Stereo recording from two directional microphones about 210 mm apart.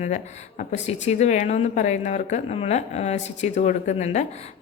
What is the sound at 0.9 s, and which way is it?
A woman's voice, 35° left (ahead or behind).